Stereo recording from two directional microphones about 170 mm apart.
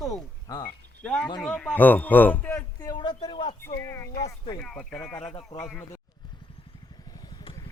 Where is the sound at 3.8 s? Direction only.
15° left (ahead or behind).